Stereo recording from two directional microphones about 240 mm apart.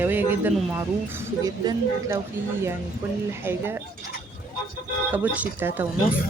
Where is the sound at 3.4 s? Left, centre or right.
Centre.